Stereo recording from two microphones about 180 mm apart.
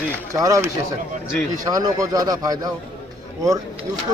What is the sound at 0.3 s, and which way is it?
A man's voice, 20° right (ahead or behind).